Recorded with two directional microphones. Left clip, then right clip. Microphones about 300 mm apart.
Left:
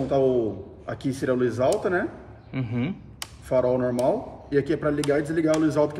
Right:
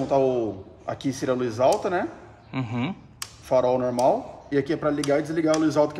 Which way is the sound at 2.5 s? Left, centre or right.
Centre.